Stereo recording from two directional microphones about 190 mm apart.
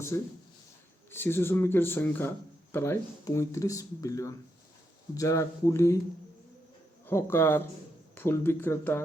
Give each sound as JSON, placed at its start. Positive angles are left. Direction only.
{"t": 0.1, "sound": "speech", "side_deg": 15}
{"t": 7.1, "sound": "speech", "side_deg": 10}